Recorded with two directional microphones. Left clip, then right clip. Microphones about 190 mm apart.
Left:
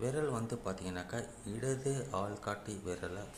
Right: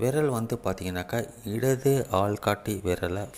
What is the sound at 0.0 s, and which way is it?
Speech, 35° right (ahead or behind).